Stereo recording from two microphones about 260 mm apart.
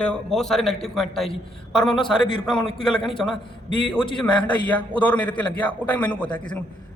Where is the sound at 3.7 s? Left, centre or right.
Centre.